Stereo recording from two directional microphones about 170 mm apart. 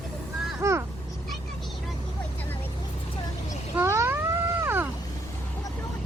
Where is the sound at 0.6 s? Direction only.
15° right (ahead or behind).